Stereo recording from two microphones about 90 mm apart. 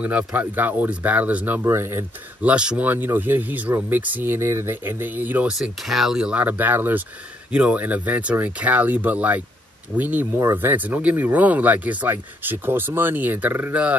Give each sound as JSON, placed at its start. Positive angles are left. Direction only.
{"t": 0.0, "sound": "speech", "side_deg": -15}
{"t": 1.6, "sound": "speech", "side_deg": -30}
{"t": 2.4, "sound": "speech", "side_deg": -10}
{"t": 5.5, "sound": "speech", "side_deg": -5}